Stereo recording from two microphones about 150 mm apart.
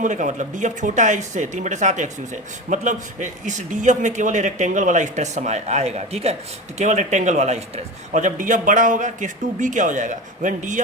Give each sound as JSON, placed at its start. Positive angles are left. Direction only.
{"t": 0.0, "sound": "speech", "side_deg": -55}